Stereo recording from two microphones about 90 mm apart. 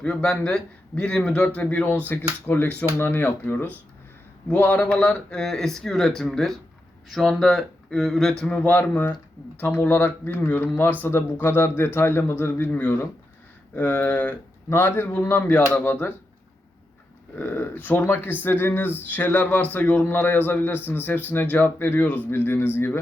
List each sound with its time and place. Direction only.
0.0 s speech: 10° left (ahead or behind)
1.6 s speech: 25° left (ahead or behind)
17.3 s speech: 20° left (ahead or behind)